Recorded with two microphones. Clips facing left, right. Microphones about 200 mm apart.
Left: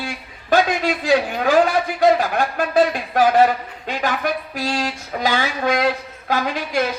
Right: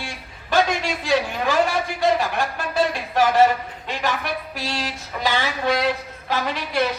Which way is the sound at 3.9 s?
50° left (ahead or behind).